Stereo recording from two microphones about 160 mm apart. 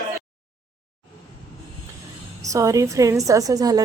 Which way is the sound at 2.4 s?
20° right (ahead or behind).